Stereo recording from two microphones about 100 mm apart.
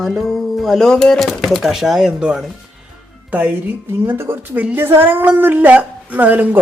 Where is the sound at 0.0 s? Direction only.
Centre (ahead or behind).